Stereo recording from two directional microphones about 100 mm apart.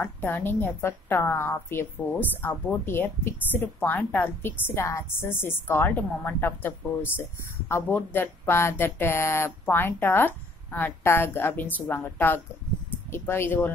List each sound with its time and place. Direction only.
0.0 s a woman's voice: 20° left (ahead or behind)